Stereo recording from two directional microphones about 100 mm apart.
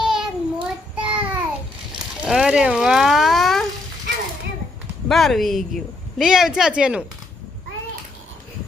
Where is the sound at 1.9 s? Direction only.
5° right (ahead or behind).